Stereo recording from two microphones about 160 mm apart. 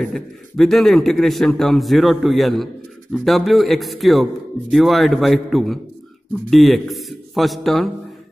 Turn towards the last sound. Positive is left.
turn(degrees=0)  # may be behind; listen again after turning